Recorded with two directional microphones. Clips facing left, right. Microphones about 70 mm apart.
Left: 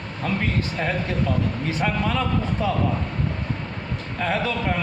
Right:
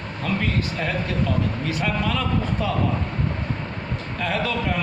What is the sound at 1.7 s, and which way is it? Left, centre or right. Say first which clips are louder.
A man's voice: left 2 dB; left.